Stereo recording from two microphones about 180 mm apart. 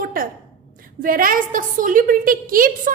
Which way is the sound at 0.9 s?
50° right (ahead or behind).